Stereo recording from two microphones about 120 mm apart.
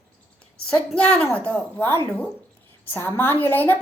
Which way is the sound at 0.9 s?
10° left (ahead or behind).